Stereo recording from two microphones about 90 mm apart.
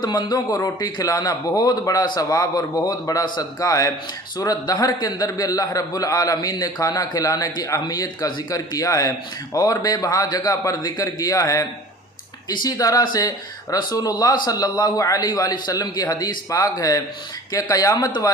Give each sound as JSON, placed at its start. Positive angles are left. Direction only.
{"t": 0.0, "sound": "a man's voice", "side_deg": 50}